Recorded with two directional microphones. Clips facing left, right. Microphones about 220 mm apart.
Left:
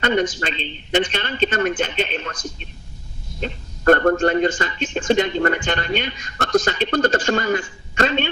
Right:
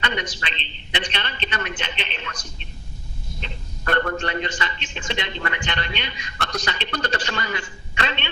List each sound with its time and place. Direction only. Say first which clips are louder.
0.0 s a man's voice: left 9 dB; 45° left (ahead or behind)